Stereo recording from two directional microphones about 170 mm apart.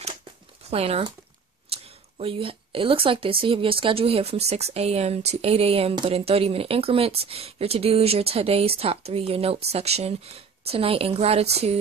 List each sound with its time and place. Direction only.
0.7 s a woman's voice: 35° right (ahead or behind)